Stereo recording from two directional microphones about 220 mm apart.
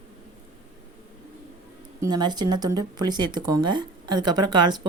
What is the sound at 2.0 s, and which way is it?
Speech, 20° right (ahead or behind).